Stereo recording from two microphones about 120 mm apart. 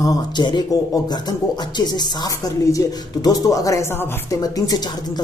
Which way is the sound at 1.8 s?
35° left (ahead or behind).